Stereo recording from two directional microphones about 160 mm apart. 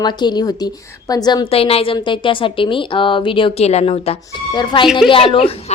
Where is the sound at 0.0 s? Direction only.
25° left (ahead or behind).